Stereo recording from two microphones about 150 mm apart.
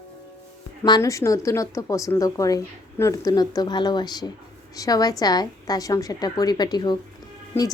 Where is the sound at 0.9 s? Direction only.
25° left (ahead or behind).